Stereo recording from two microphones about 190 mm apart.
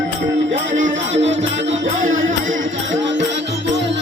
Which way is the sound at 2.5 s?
75° right (ahead or behind).